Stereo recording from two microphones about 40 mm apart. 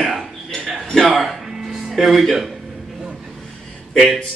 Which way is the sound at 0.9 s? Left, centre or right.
Centre.